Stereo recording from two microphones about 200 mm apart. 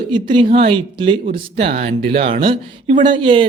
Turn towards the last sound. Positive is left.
turn(degrees=-25)  # may be behind; listen again after turning